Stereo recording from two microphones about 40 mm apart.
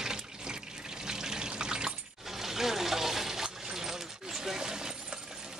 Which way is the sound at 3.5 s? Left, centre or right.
Centre.